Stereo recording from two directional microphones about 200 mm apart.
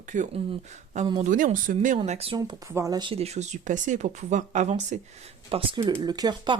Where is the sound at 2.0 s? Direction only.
30° right (ahead or behind).